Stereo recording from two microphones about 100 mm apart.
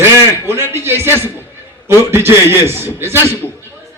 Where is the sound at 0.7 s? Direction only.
25° right (ahead or behind).